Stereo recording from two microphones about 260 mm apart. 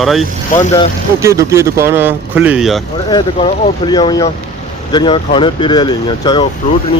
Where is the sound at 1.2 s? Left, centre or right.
Centre.